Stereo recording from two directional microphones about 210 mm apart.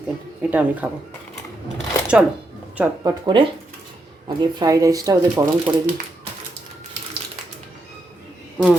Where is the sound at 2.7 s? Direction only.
10° right (ahead or behind).